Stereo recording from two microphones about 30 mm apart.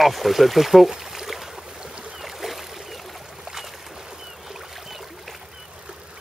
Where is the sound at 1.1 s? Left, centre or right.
Centre.